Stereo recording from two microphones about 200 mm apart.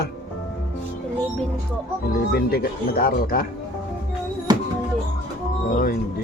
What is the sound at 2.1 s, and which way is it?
Speech, 50° left (ahead or behind).